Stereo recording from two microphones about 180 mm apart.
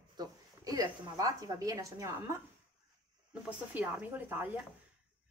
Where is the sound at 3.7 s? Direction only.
10° right (ahead or behind).